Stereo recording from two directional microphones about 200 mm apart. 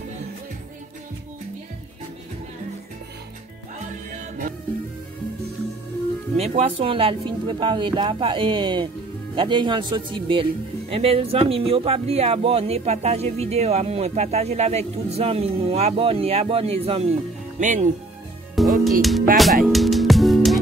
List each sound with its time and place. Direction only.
6.3 s speech: 30° right (ahead or behind)
18.5 s music: centre (ahead or behind)